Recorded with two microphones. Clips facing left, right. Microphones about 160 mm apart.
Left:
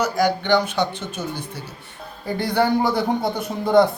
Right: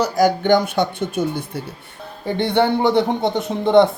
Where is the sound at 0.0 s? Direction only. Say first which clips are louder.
Right 4 dB; 45° right (ahead or behind).